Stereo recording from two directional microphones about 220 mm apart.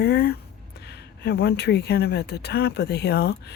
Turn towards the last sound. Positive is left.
turn(degrees=45)  # may be behind; listen again after turning